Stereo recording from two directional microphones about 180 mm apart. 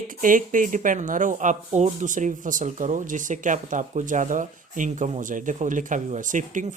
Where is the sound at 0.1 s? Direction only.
50° right (ahead or behind).